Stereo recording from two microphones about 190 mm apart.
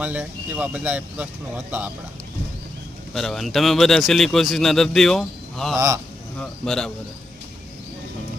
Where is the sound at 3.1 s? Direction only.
Centre (ahead or behind).